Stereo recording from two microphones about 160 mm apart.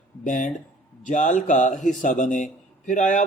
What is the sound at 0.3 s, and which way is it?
A man's voice, 55° left (ahead or behind).